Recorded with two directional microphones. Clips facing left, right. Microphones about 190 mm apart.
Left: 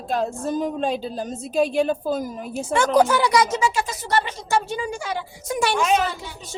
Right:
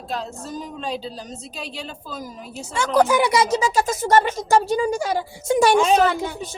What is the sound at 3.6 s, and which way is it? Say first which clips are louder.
Speech: right 3 dB; 40° right (ahead or behind).